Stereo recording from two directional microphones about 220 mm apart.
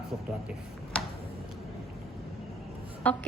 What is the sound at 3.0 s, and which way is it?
Music, 5° left (ahead or behind).